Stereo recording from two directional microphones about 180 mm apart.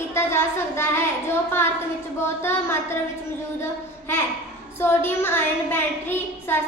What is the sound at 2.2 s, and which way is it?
Speech, 15° left (ahead or behind).